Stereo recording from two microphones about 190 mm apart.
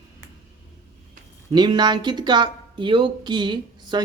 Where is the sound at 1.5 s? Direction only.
20° right (ahead or behind).